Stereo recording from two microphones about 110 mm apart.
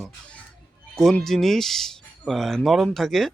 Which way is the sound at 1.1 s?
5° left (ahead or behind).